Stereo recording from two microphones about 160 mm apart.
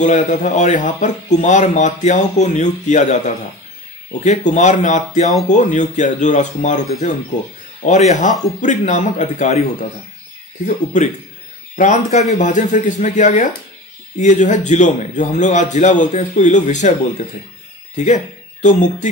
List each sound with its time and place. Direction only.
0.0 s speech: 50° left (ahead or behind)
11.7 s speech: 50° left (ahead or behind)
17.9 s speech: 50° left (ahead or behind)